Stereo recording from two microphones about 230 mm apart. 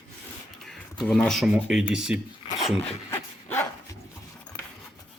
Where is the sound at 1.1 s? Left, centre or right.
Centre.